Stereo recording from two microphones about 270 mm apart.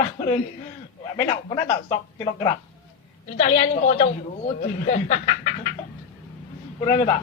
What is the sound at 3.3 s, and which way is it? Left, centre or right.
Speech, left.